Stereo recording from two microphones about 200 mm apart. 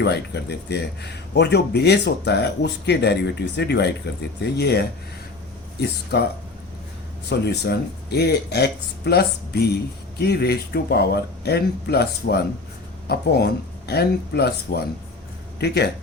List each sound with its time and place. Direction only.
0.0 s speech: 55° left (ahead or behind)
6.1 s speech: 50° left (ahead or behind)